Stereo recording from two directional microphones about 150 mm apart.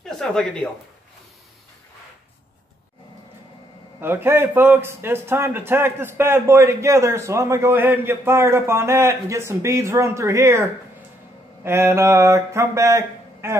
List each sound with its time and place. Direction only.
0.0 s speech: 5° left (ahead or behind)
4.0 s a man's voice: 15° right (ahead or behind)
11.6 s mantra: 15° right (ahead or behind)